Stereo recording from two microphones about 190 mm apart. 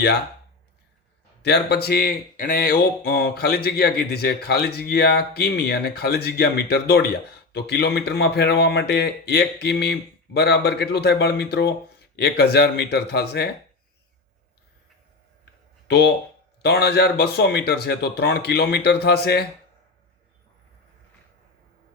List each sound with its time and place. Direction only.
1.4 s speech: 60° left (ahead or behind)
15.9 s speech: 60° left (ahead or behind)